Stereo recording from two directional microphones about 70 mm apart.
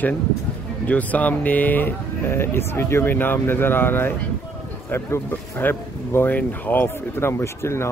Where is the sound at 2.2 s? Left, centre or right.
Left.